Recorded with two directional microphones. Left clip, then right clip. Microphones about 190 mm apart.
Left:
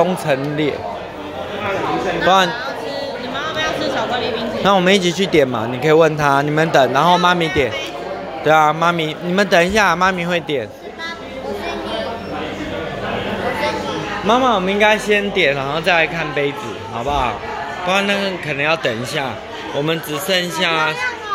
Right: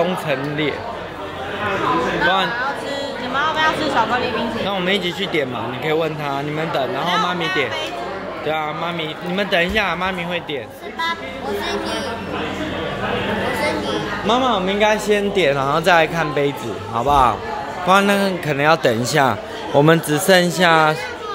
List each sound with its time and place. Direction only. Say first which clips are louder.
0.0 s speech: left 3 dB; 20° left (ahead or behind)
3.3 s a sound: right 4 dB; 25° right (ahead or behind)
4.6 s speech: left 10 dB; 30° left (ahead or behind)
13.6 s chatter: even; 60° right (ahead or behind)
14.2 s a man's voice: left 3 dB; 15° left (ahead or behind)
15.0 s speech: left 1 dB; 5° right (ahead or behind)
17.8 s speech: right 3 dB; 20° right (ahead or behind)